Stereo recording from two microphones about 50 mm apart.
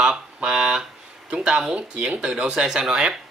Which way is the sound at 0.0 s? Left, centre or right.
Centre.